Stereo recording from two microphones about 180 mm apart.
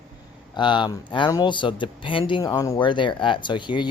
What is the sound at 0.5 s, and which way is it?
Speech, 25° left (ahead or behind).